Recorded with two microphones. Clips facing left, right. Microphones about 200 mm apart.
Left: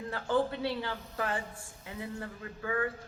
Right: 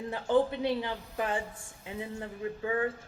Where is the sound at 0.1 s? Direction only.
20° right (ahead or behind).